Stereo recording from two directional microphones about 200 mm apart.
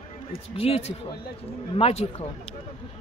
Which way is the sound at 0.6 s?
30° left (ahead or behind).